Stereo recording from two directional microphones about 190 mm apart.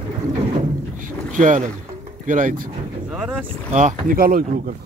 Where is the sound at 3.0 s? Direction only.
5° right (ahead or behind).